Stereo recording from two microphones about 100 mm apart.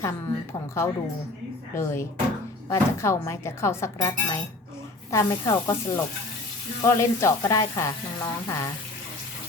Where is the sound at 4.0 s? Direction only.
40° left (ahead or behind).